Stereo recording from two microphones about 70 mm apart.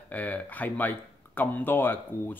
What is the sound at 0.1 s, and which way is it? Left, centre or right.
Speech, left.